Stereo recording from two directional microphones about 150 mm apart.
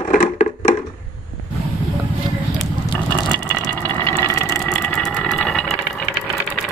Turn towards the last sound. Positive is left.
turn(degrees=5)  # may be behind; listen again after turning